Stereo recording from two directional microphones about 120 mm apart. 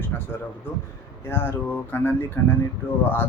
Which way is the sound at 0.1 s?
20° left (ahead or behind).